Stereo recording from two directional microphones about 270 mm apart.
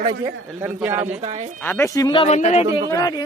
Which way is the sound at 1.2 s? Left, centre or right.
Right.